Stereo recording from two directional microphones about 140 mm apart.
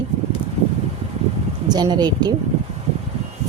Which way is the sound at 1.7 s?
30° right (ahead or behind).